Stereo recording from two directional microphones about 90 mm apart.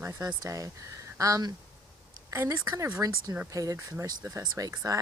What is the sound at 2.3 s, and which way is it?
Speech, 30° right (ahead or behind).